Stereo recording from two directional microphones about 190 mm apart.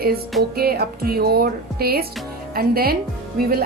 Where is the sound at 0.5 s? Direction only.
55° right (ahead or behind).